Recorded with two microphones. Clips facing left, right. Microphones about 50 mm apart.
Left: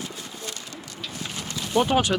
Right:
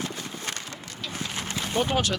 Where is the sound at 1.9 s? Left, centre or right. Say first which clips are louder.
Left 4 dB; centre.